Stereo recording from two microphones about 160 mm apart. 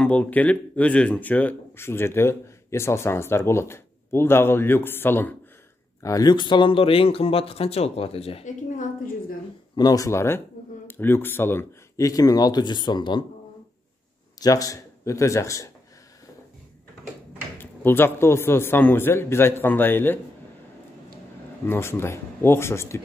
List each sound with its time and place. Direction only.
0.0 s speech: 10° left (ahead or behind); by 8.5 s 40° left (ahead or behind)
8.6 s a woman's voice: 55° left (ahead or behind)
9.8 s speech: 20° left (ahead or behind)
14.4 s speech: 20° left (ahead or behind)
17.6 s speech: 15° left (ahead or behind)
21.6 s speech: 15° left (ahead or behind)